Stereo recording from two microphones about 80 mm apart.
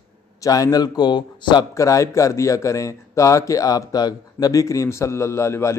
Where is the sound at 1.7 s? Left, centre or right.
Left.